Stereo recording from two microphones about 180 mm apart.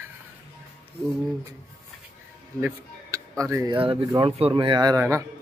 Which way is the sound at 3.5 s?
20° right (ahead or behind).